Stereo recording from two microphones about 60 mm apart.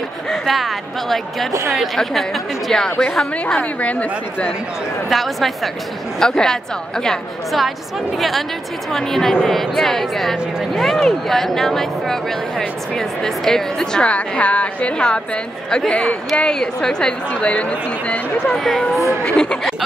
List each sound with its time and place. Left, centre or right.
0.3 s a woman's voice: centre
3.8 s a woman's voice: left
5.1 s a woman's voice: centre
14.0 s a woman's voice: left
16.3 s a woman's voice: centre
18.6 s speech: centre
19.2 s a woman's voice: centre